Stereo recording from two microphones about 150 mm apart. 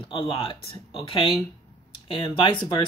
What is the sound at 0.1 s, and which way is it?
Speech, 35° left (ahead or behind).